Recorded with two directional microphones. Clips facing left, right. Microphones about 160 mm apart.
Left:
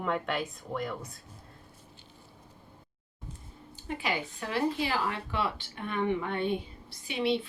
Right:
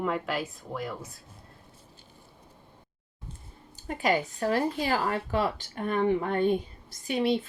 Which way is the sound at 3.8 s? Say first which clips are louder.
Right 6 dB; 45° right (ahead or behind).